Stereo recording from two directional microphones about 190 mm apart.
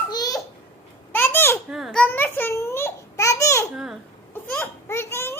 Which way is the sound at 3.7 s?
5° right (ahead or behind).